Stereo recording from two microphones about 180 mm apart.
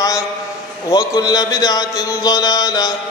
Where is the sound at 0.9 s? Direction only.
20° left (ahead or behind).